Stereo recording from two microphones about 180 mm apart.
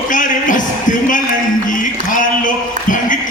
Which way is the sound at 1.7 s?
45° left (ahead or behind).